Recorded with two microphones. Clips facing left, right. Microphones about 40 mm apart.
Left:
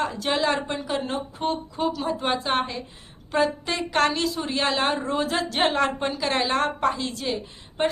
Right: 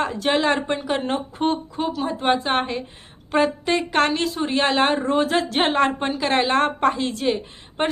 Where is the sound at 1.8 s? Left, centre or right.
Right.